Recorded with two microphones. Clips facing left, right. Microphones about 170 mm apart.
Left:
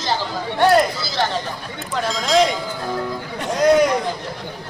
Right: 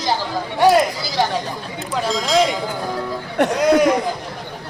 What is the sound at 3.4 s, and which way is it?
Chatter, 70° right (ahead or behind).